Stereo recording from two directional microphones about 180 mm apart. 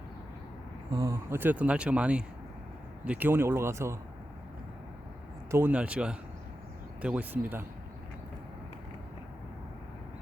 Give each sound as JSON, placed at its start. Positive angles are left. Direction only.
{"t": 0.9, "sound": "speech", "side_deg": -15}
{"t": 5.5, "sound": "speech", "side_deg": -10}